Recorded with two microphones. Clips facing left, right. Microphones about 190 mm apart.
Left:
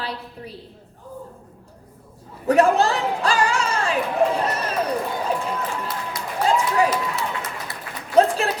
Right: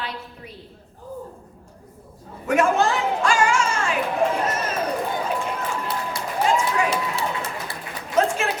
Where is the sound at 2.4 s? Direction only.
35° left (ahead or behind).